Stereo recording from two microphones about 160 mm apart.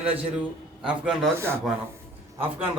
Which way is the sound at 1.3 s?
15° right (ahead or behind).